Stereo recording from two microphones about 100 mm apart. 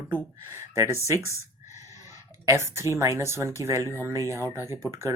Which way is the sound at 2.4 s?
30° right (ahead or behind).